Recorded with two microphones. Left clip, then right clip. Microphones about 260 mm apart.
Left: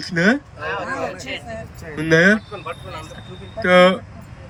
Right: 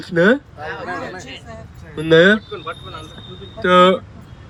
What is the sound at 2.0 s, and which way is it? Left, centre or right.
Speech, centre.